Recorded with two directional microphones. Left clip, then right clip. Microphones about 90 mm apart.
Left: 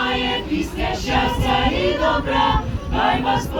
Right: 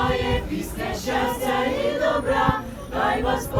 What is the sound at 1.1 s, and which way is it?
Music, 40° right (ahead or behind).